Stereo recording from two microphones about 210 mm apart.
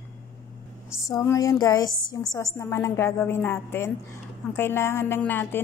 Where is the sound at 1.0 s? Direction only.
15° left (ahead or behind).